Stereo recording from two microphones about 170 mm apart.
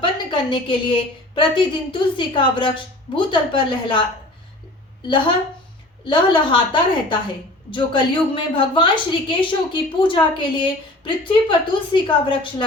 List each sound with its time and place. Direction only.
0.0 s a woman's voice: 30° left (ahead or behind)
5.0 s a woman's voice: 30° left (ahead or behind)
7.7 s a woman's voice: 30° left (ahead or behind)